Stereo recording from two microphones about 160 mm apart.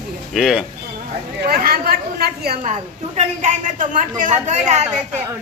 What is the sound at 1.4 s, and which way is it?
Speech, 70° right (ahead or behind).